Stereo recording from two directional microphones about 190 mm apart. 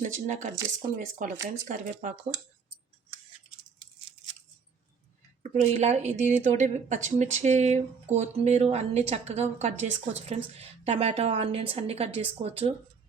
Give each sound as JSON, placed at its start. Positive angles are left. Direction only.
{"t": 0.0, "sound": "speech", "side_deg": -40}
{"t": 5.4, "sound": "speech", "side_deg": -40}